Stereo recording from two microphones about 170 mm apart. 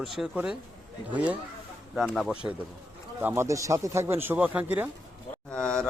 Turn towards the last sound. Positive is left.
turn(degrees=5)  # may be behind; listen again after turning